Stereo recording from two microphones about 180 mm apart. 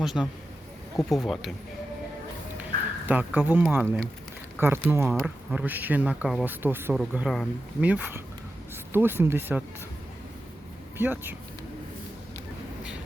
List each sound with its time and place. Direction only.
0.0 s speech: centre (ahead or behind)
3.1 s speech: 10° right (ahead or behind)
10.9 s speech: 10° right (ahead or behind)